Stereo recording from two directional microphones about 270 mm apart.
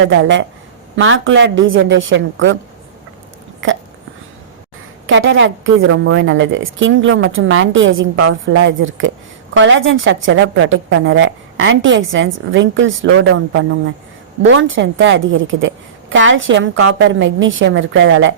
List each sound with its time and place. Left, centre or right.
0.0 s a woman's voice: right
5.0 s a woman's voice: right